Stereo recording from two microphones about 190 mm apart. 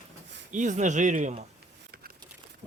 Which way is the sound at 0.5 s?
40° right (ahead or behind).